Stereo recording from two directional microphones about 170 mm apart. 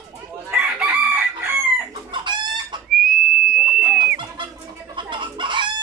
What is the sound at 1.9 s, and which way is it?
Chicken, 25° right (ahead or behind).